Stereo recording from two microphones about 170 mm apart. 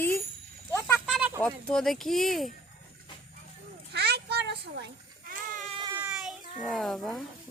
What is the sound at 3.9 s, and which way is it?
Goat, 75° right (ahead or behind).